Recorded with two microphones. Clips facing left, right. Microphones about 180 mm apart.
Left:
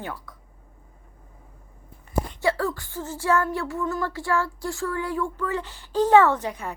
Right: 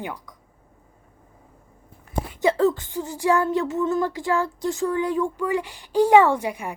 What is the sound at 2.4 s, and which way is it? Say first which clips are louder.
Speech: right 7 dB; 20° right (ahead or behind).